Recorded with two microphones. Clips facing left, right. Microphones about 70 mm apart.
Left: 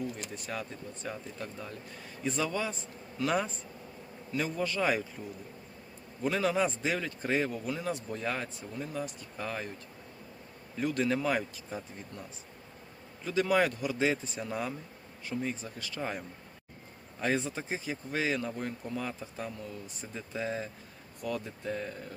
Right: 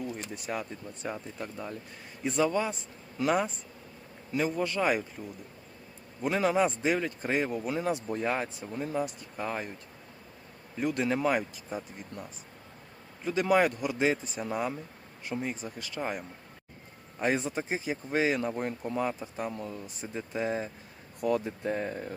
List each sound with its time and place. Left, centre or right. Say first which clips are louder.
0.4 s a man's voice: right 4 dB; centre
4.4 s speech: right 3 dB; centre
6.2 s speech: right 3 dB; centre
9.4 s speech: right 3 dB; centre
10.8 s speech: right 1 dB; centre
19.5 s speech: right 5 dB; right
19.7 s speech: right 4 dB; right